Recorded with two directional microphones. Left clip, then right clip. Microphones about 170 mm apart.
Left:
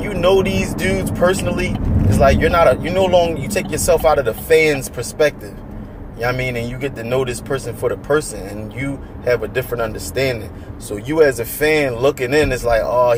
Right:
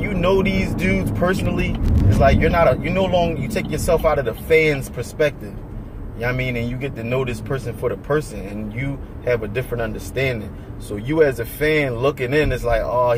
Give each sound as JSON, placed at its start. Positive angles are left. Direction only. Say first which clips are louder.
{"t": 0.0, "sound": "speech", "louder": "left 4 dB", "side_deg": -5}